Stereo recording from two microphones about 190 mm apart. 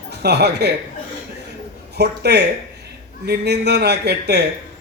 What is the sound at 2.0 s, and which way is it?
Speech, 60° right (ahead or behind).